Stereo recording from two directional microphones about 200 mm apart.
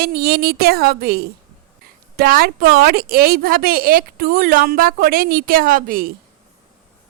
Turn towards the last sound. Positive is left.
turn(degrees=-45)  # may be behind; listen again after turning